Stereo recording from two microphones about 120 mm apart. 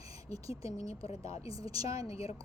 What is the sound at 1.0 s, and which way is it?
Speech, 55° left (ahead or behind).